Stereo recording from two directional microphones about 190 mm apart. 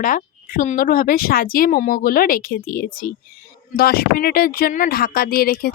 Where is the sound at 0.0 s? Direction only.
45° left (ahead or behind).